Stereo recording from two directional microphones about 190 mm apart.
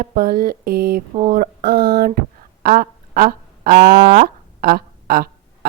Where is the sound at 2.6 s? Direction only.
50° right (ahead or behind).